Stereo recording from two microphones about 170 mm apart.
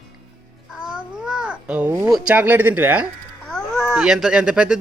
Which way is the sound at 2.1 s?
10° right (ahead or behind).